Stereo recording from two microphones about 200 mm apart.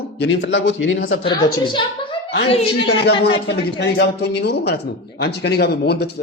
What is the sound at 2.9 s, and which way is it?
Speech, 30° left (ahead or behind).